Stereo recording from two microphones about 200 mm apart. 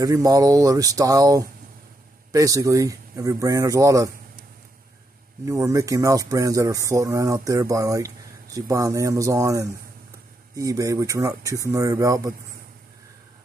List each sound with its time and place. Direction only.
0.0 s speech: 15° right (ahead or behind)
5.4 s speech: 15° right (ahead or behind)